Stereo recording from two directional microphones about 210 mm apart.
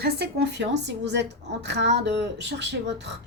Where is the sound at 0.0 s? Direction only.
50° right (ahead or behind).